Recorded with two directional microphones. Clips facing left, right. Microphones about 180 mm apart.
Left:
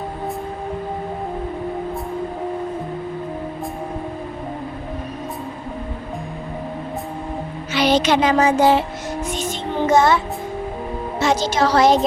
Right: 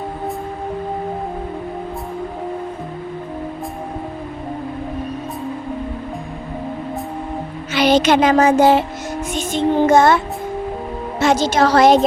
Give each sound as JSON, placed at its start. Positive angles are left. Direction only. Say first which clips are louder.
{"t": 7.7, "sound": "music", "louder": "right 3 dB", "side_deg": -50}
{"t": 11.2, "sound": "a woman's voice", "louder": "right 3 dB", "side_deg": -50}